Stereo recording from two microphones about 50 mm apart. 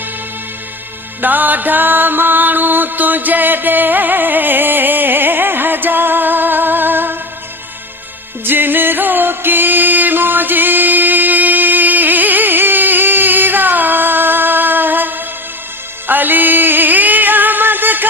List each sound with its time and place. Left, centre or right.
1.2 s music: right
8.4 s music: right